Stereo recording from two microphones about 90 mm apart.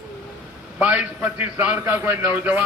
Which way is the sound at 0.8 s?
15° right (ahead or behind).